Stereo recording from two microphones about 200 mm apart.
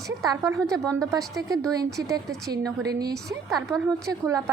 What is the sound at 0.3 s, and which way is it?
A woman's voice, 15° right (ahead or behind).